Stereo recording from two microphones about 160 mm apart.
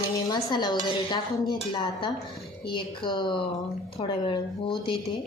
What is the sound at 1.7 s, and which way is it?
Cutlery, 30° left (ahead or behind).